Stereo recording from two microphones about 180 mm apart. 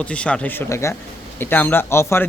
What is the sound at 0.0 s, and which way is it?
Speech, 5° left (ahead or behind).